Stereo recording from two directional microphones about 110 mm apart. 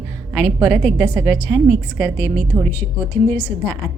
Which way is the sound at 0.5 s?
20° right (ahead or behind).